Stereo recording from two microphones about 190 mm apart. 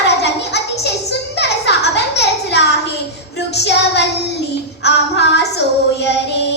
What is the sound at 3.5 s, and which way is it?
Child singing, 60° left (ahead or behind).